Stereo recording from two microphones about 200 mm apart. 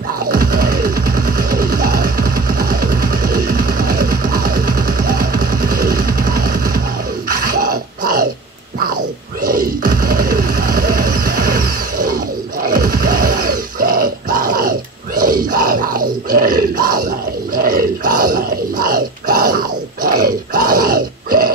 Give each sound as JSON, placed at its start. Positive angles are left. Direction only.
{"t": 0.3, "sound": "music", "side_deg": -45}
{"t": 9.4, "sound": "music", "side_deg": -45}
{"t": 12.6, "sound": "a sound", "side_deg": -45}